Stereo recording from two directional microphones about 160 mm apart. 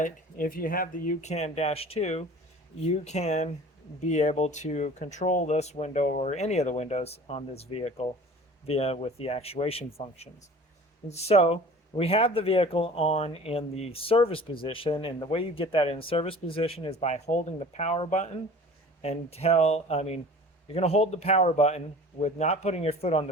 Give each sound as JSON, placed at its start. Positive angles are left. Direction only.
{"t": 0.0, "sound": "speech", "side_deg": 60}
{"t": 1.2, "sound": "speech", "side_deg": 45}